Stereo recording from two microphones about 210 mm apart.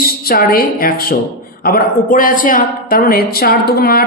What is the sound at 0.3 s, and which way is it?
Speech, 45° left (ahead or behind).